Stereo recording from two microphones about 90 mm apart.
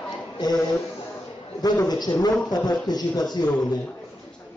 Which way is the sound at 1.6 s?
50° left (ahead or behind).